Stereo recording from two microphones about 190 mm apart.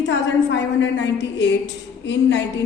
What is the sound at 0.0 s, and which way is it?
A woman's voice, 70° left (ahead or behind).